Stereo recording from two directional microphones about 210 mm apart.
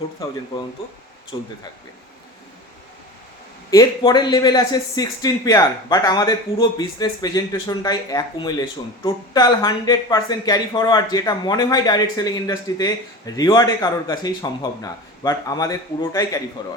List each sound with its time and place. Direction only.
1.3 s speech: 20° left (ahead or behind)
3.7 s speech: 20° left (ahead or behind)